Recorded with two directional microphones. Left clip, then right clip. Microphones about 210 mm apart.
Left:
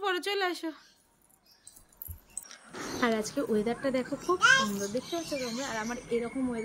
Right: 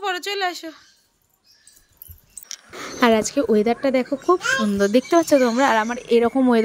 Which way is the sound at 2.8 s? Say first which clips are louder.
Right 12 dB; 35° right (ahead or behind).